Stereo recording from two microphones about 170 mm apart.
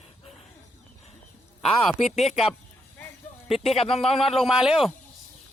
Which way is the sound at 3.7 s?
35° left (ahead or behind).